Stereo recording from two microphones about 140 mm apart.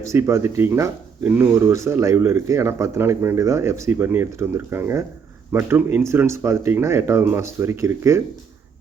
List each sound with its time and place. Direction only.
0.0 s speech: 20° right (ahead or behind)